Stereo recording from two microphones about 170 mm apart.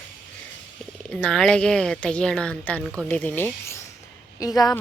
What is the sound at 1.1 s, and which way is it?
A woman's voice, 5° left (ahead or behind).